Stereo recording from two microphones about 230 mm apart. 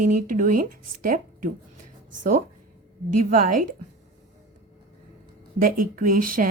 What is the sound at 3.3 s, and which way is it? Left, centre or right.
Speech, right.